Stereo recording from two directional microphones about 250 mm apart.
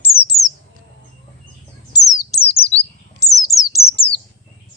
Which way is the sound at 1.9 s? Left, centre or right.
Centre.